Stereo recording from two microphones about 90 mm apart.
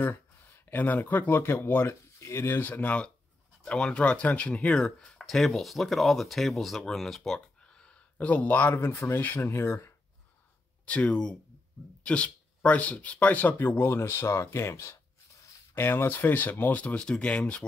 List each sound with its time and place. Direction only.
0.7 s speech: 20° left (ahead or behind)
9.1 s speech: 20° left (ahead or behind)
10.9 s speech: 15° left (ahead or behind)